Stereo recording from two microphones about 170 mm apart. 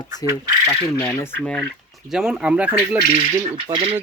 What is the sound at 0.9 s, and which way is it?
Speech, 10° left (ahead or behind).